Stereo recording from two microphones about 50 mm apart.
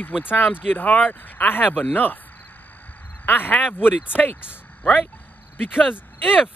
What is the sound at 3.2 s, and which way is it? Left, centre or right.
Speech, left.